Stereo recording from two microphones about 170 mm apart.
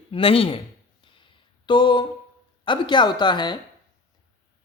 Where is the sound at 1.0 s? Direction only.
30° left (ahead or behind).